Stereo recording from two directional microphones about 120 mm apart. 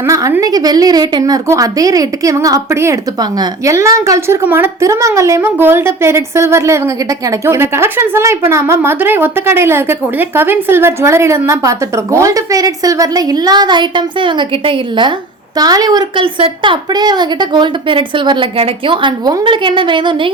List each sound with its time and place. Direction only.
0.1 s a woman's voice: 25° right (ahead or behind); by 15.1 s 45° right (ahead or behind)
15.5 s a woman's voice: 35° right (ahead or behind)
16.2 s a woman's voice: 45° right (ahead or behind)